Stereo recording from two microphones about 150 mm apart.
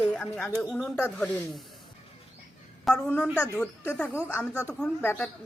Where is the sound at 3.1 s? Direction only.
15° left (ahead or behind).